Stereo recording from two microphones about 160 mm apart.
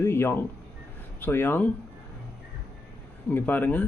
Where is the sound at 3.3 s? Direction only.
10° left (ahead or behind).